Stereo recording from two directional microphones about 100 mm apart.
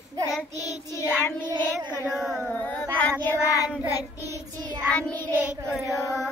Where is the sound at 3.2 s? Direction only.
25° left (ahead or behind).